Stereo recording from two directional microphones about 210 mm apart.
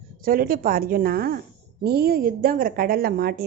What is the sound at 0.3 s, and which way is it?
A woman's voice, 45° right (ahead or behind).